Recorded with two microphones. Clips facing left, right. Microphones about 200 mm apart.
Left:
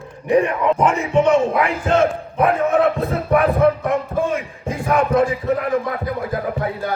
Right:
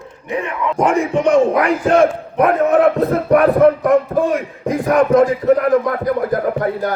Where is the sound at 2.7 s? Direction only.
40° right (ahead or behind).